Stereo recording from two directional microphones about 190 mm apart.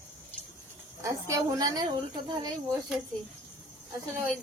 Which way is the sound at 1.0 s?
20° right (ahead or behind).